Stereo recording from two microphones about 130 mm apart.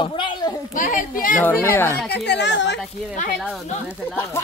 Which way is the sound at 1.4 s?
15° left (ahead or behind).